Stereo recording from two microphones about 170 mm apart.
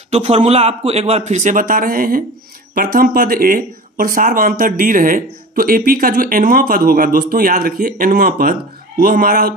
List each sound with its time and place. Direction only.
0.1 s a man's voice: 40° right (ahead or behind); by 9.6 s 60° right (ahead or behind)